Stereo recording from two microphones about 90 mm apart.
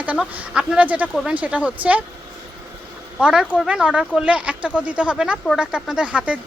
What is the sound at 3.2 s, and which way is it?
Speech, 10° right (ahead or behind).